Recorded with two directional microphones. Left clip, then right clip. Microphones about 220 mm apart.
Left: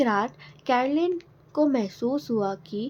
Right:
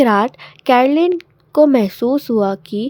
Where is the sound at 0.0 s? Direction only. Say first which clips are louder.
Right 11 dB; 45° right (ahead or behind).